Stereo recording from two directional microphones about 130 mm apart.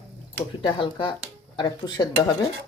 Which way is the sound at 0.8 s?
40° left (ahead or behind).